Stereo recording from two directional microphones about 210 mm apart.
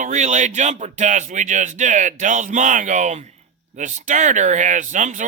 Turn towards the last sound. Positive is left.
turn(degrees=-35)  # may be behind; listen again after turning